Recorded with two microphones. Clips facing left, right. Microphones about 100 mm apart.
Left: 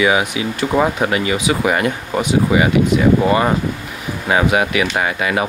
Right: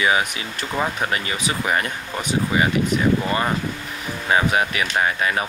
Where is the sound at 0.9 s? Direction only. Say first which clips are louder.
Left 7 dB; 20° left (ahead or behind).